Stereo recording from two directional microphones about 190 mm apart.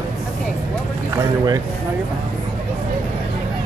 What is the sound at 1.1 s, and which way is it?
Boat, 20° right (ahead or behind).